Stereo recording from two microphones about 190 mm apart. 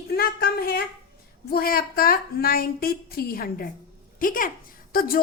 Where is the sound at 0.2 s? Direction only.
55° left (ahead or behind).